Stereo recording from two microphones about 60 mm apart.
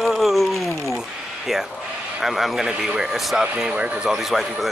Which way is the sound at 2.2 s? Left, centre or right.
Centre.